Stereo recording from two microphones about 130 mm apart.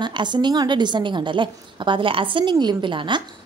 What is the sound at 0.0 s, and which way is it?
Speech, 35° right (ahead or behind).